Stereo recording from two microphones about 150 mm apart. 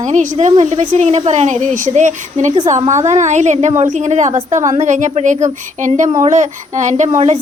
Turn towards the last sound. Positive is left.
turn(degrees=-50)  # may be behind; listen again after turning